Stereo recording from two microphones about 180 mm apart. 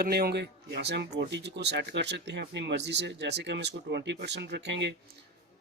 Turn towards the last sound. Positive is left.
turn(degrees=-75)  # may be behind; listen again after turning